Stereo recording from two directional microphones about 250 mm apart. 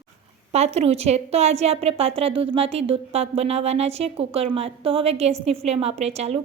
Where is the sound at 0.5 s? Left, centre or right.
Right.